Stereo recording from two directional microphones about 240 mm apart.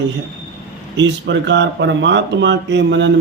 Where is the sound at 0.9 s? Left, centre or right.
Right.